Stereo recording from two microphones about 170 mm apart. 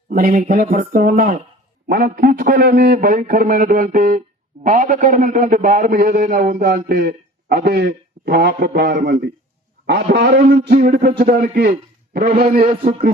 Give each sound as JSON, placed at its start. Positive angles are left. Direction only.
{"t": 0.1, "sound": "a man's voice", "side_deg": -55}
{"t": 12.5, "sound": "speech", "side_deg": -40}